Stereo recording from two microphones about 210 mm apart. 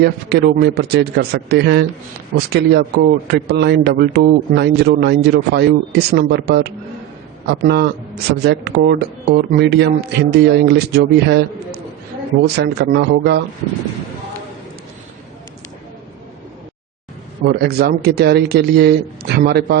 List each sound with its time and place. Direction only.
0.0 s speech: 50° right (ahead or behind)
17.4 s speech: 50° right (ahead or behind)